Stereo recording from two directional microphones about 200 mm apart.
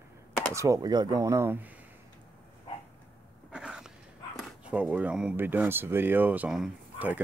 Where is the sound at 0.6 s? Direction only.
15° right (ahead or behind).